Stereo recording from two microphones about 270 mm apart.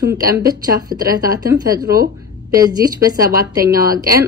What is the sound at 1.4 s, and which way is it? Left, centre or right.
A woman's voice, centre.